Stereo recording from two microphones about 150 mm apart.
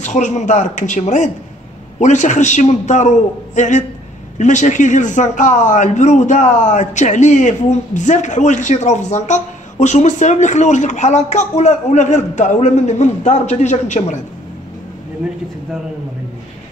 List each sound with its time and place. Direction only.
0.0 s a man's voice: 55° left (ahead or behind)